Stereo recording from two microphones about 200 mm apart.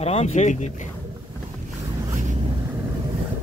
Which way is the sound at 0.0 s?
30° left (ahead or behind).